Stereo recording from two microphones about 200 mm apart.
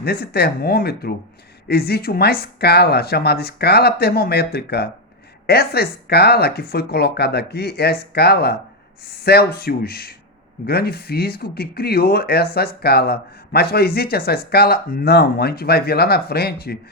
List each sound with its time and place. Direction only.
0.0 s speech: 50° left (ahead or behind)